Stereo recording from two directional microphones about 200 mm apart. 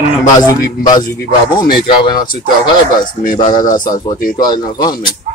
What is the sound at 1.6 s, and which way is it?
Speech, 50° left (ahead or behind).